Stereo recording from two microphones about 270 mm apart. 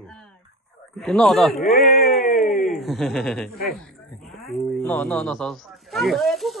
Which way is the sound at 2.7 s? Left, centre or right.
Centre.